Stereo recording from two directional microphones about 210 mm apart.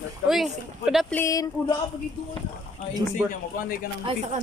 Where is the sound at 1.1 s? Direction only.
15° left (ahead or behind).